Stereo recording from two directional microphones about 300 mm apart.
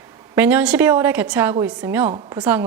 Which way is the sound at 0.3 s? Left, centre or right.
Centre.